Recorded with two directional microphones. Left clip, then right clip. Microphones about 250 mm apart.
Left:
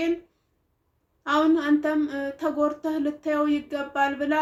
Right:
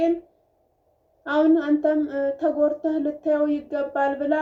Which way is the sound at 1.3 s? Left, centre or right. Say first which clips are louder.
Right 2 dB; left.